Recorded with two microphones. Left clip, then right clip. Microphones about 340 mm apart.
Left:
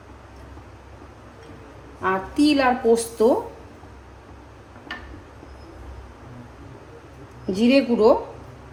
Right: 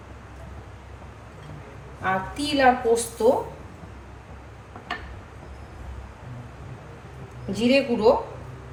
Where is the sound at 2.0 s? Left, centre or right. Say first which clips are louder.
Left 5 dB; centre.